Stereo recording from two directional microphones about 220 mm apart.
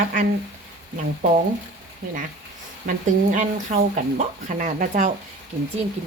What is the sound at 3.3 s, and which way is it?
A woman's voice, 35° right (ahead or behind).